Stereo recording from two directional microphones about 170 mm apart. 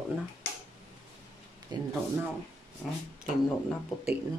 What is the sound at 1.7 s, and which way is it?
Speech, 25° right (ahead or behind).